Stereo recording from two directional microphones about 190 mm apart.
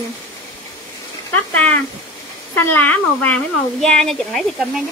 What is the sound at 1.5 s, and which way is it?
Speech, 5° left (ahead or behind).